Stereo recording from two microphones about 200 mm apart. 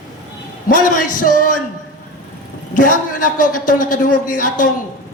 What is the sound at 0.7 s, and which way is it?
Speech, 40° left (ahead or behind).